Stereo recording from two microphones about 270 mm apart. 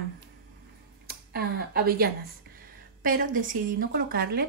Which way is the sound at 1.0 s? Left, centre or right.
Right.